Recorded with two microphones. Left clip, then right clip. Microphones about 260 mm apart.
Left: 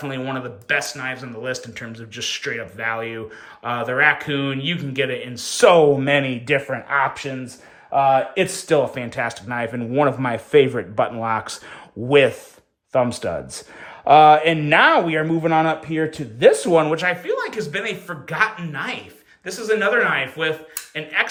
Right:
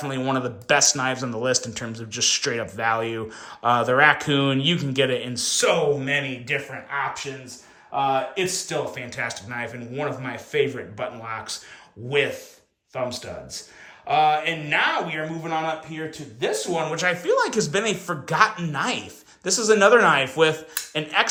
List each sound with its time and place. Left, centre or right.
0.0 s speech: centre
12.9 s speech: centre
16.8 s speech: centre
17.2 s speech: centre